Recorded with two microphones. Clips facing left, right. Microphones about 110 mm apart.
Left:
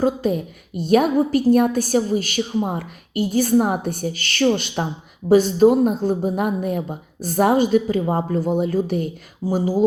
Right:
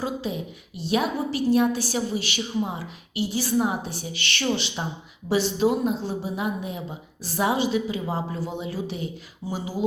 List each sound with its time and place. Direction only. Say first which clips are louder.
0.0 s a woman's voice: left 9 dB; 50° left (ahead or behind)